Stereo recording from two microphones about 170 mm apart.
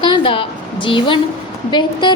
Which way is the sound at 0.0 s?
30° left (ahead or behind).